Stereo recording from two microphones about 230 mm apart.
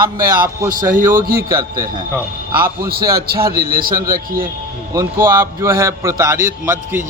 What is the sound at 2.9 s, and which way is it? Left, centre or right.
A man's voice, right.